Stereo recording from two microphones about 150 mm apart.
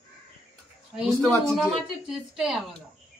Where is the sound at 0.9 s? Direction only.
5° right (ahead or behind).